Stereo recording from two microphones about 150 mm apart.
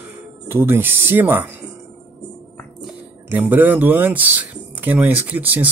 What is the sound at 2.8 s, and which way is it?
Speech, 10° right (ahead or behind).